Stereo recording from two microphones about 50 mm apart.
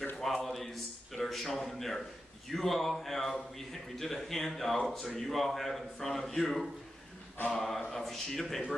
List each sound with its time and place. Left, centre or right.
0.3 s a sound: centre
2.5 s speech: centre
7.4 s a capella: centre
7.9 s speech: centre